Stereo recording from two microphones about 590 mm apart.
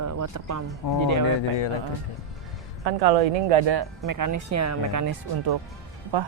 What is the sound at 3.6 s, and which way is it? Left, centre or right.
Speech, right.